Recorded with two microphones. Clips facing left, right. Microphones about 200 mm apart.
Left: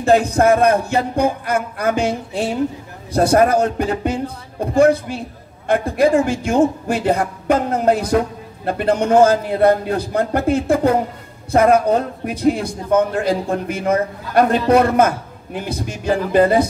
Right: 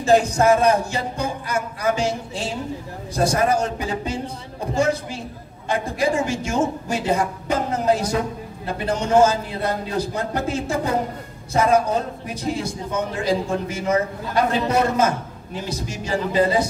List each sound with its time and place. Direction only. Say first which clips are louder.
0.0 s a man's voice: left 3 dB; 55° left (ahead or behind)